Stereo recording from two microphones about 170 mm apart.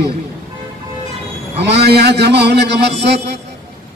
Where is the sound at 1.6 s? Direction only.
75° right (ahead or behind).